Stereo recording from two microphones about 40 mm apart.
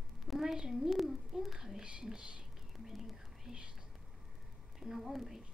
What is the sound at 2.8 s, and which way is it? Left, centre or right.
Whispering, centre.